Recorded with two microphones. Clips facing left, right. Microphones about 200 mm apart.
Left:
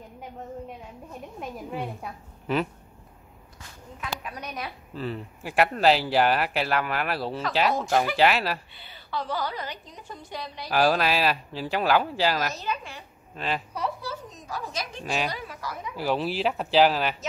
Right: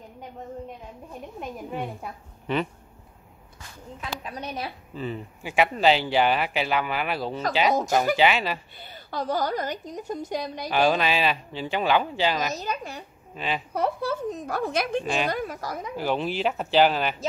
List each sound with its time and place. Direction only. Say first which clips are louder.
1.4 s speech: right 1 dB; centre (ahead or behind)
4.0 s a woman's voice: right 1 dB; 30° right (ahead or behind)
4.9 s speech: left 1 dB; centre (ahead or behind)
8.7 s a woman's voice: right 1 dB; 45° right (ahead or behind)
10.7 s speech: even; centre (ahead or behind)
12.5 s a woman's voice: right 1 dB; 40° right (ahead or behind)
13.7 s a woman's voice: right 6 dB; 55° right (ahead or behind)
16.0 s speech: even; 5° left (ahead or behind)